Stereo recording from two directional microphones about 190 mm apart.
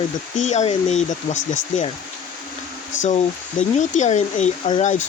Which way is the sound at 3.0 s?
40° left (ahead or behind).